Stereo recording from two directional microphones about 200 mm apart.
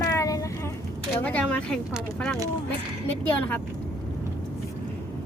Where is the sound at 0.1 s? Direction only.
15° left (ahead or behind).